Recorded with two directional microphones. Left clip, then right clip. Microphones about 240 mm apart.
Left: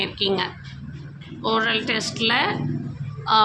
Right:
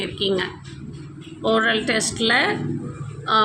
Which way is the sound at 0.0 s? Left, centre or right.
Centre.